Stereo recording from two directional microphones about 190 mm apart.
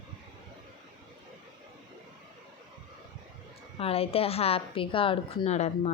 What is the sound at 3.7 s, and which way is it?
A woman's voice, 30° left (ahead or behind).